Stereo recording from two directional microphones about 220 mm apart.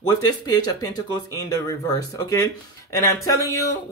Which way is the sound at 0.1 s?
15° left (ahead or behind).